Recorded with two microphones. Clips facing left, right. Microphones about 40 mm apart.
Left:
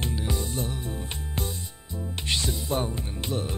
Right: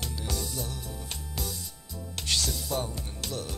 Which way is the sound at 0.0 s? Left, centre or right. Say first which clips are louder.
Left 5 dB; left.